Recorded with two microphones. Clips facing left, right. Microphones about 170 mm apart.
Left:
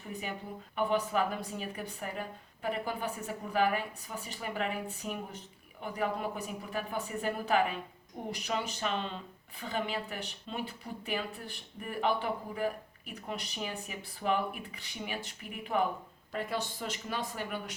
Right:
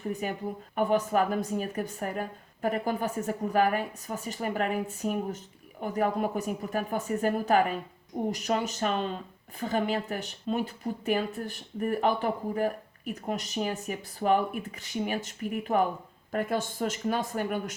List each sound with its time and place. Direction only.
0.1 s a woman's voice: 45° right (ahead or behind)